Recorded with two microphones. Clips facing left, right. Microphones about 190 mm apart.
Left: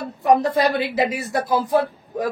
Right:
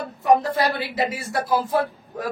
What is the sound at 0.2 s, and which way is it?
Speech, 20° left (ahead or behind).